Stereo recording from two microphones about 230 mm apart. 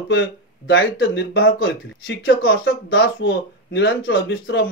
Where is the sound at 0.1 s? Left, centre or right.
Left.